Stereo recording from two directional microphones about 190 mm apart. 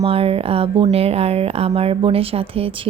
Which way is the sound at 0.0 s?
30° right (ahead or behind).